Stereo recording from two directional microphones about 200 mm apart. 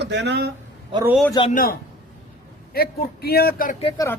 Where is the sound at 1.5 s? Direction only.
45° left (ahead or behind).